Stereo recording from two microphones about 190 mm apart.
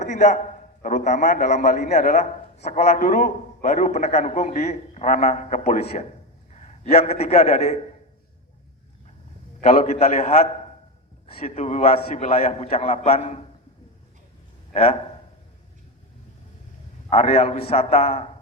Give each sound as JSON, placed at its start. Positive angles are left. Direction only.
{"t": 0.0, "sound": "a man's voice", "side_deg": 40}
{"t": 9.8, "sound": "a man's voice", "side_deg": 35}
{"t": 14.7, "sound": "speech", "side_deg": 30}
{"t": 17.1, "sound": "a man's voice", "side_deg": 35}